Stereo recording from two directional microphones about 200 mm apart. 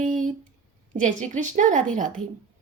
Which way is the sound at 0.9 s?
40° right (ahead or behind).